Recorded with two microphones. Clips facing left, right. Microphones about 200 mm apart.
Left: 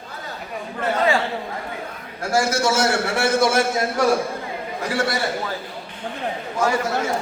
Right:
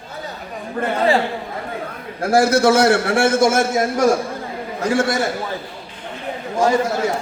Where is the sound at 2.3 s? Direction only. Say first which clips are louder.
Right 6 dB; 60° right (ahead or behind).